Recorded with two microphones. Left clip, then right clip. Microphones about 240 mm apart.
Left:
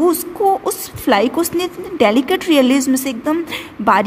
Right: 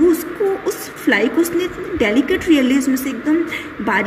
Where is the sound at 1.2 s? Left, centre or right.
Left.